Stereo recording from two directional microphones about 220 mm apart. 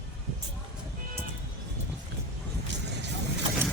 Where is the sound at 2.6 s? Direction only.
50° right (ahead or behind).